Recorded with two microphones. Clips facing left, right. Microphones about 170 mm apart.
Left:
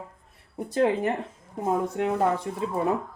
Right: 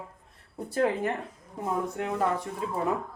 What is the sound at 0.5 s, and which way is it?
Speech, 20° left (ahead or behind).